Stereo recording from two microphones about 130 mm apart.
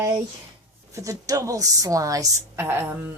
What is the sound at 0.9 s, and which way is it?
Speech, 25° right (ahead or behind).